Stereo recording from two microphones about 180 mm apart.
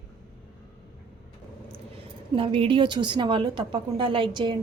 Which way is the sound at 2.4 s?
30° right (ahead or behind).